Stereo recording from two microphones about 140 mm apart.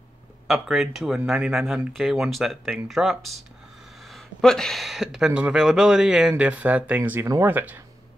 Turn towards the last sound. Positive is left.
turn(degrees=-15)  # may be behind; listen again after turning